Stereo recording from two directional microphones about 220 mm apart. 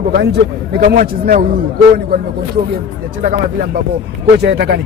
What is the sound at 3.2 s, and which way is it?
Speech, 35° right (ahead or behind).